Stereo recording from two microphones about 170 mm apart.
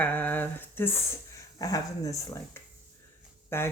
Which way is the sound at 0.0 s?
10° left (ahead or behind).